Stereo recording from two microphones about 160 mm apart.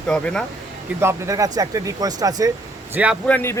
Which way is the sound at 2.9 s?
10° right (ahead or behind).